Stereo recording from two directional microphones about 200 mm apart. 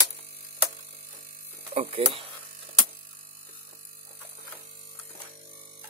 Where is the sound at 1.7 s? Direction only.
30° right (ahead or behind).